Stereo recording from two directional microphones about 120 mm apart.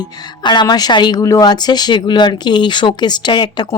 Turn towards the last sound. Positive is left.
turn(degrees=40)  # may be behind; listen again after turning